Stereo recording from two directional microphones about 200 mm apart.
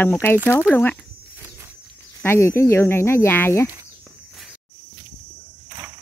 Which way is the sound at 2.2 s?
10° left (ahead or behind).